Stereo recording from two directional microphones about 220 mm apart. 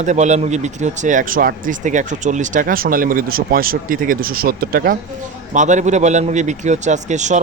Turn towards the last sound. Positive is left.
turn(degrees=-35)  # may be behind; listen again after turning